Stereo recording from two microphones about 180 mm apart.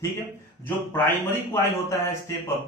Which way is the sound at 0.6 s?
10° left (ahead or behind).